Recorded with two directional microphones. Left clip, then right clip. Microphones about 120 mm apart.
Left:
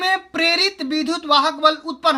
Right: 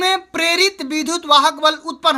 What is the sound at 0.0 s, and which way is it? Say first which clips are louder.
Speech: right 1 dB; 45° right (ahead or behind).